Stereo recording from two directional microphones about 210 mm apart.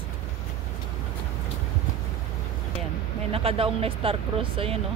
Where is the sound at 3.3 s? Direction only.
25° right (ahead or behind).